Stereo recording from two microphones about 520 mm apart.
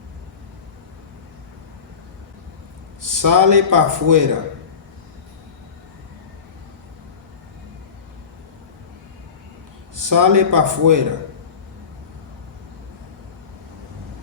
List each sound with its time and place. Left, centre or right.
3.0 s a man's voice: right
9.9 s a man's voice: right